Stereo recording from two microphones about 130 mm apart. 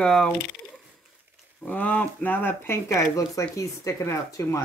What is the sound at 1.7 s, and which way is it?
Speech, 10° left (ahead or behind).